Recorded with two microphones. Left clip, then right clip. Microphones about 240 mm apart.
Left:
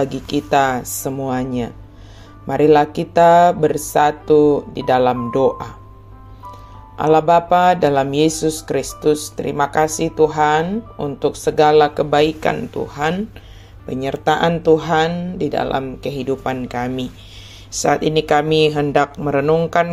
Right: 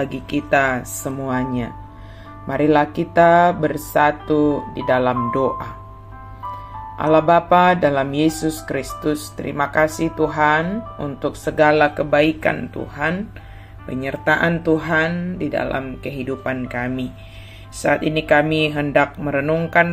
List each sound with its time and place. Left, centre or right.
0.0 s speech: centre
7.0 s speech: centre